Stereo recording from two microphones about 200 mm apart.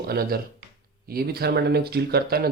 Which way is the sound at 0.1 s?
50° right (ahead or behind).